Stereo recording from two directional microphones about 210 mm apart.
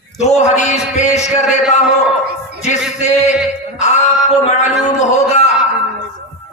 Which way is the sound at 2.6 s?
35° left (ahead or behind).